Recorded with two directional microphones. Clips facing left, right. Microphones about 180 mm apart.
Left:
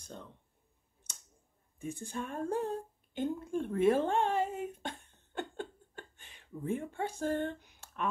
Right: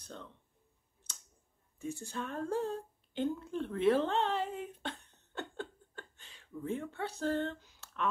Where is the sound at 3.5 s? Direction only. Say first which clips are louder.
Left 3 dB; 50° left (ahead or behind).